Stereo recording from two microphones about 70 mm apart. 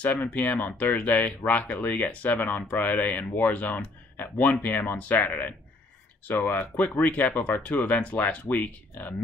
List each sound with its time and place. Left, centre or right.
0.0 s speech: left